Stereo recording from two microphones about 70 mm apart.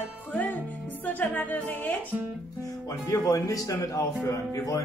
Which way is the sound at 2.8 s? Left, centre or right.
Left.